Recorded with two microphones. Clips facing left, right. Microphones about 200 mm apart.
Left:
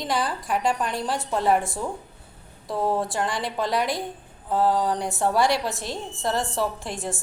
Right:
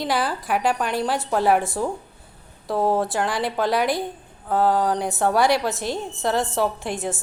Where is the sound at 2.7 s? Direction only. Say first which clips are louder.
Right 4 dB; 25° right (ahead or behind).